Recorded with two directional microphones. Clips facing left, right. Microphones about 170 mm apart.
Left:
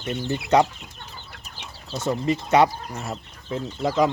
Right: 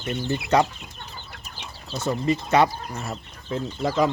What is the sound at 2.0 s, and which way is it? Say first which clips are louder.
Speech: even; 15° left (ahead or behind).